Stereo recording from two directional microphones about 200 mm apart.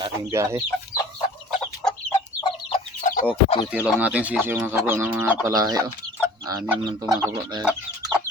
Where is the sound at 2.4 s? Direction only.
30° left (ahead or behind).